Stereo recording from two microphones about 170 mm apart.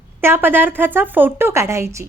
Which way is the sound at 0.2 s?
15° right (ahead or behind).